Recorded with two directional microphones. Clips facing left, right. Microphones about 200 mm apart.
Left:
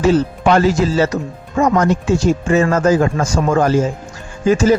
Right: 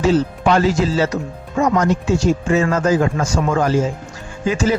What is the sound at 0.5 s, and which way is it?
Speech, 45° left (ahead or behind).